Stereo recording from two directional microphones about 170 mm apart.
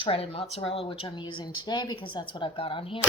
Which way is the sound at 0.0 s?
35° left (ahead or behind).